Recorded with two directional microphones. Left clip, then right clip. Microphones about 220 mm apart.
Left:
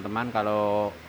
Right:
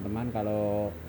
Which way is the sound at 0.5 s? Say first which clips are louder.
Left 4 dB; 90° left.